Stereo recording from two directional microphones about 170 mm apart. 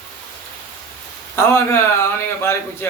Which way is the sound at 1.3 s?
15° left (ahead or behind).